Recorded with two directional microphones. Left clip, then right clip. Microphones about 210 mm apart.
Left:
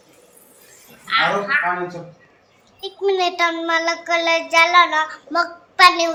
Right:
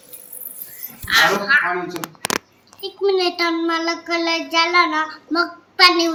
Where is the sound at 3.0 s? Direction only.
20° left (ahead or behind).